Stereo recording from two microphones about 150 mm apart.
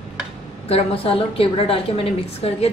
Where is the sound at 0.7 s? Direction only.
40° left (ahead or behind).